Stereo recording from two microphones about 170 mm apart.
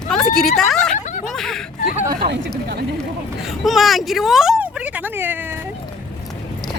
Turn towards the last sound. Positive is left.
turn(degrees=-10)  # may be behind; listen again after turning